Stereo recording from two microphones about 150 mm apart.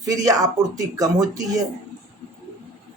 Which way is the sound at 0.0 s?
25° right (ahead or behind).